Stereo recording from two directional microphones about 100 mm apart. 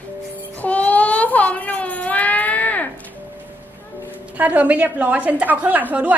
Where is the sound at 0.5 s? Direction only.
15° left (ahead or behind).